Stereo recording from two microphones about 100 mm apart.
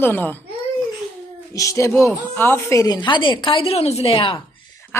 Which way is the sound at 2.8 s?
40° left (ahead or behind).